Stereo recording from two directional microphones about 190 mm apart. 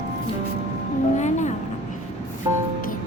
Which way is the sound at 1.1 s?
40° left (ahead or behind).